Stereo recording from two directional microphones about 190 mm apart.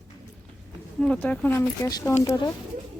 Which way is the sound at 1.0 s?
5° left (ahead or behind).